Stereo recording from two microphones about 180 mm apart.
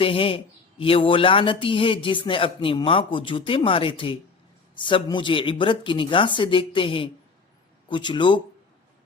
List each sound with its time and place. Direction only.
0.0 s speech: 30° left (ahead or behind)